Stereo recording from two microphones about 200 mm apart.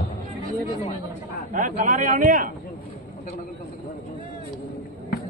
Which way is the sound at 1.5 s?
40° right (ahead or behind).